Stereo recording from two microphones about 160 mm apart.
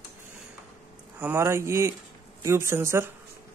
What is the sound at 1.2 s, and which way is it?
A man's voice, 15° right (ahead or behind).